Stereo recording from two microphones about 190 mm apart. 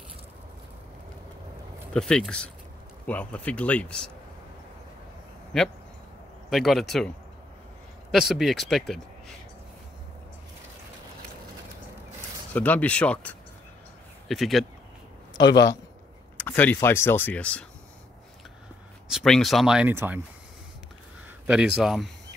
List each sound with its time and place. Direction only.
2.0 s speech: 5° left (ahead or behind)
5.5 s speech: 5° left (ahead or behind)
8.1 s speech: centre (ahead or behind)
12.5 s speech: 10° left (ahead or behind)
15.3 s speech: 20° left (ahead or behind)
16.3 s speech: 10° left (ahead or behind)
19.0 s speech: centre (ahead or behind)
21.5 s speech: 5° right (ahead or behind)